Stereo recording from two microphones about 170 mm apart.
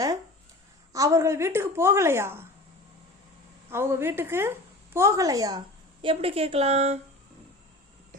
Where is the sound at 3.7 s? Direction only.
15° right (ahead or behind); by 7.0 s 40° right (ahead or behind).